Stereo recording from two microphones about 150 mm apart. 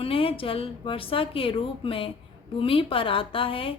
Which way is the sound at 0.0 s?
35° left (ahead or behind).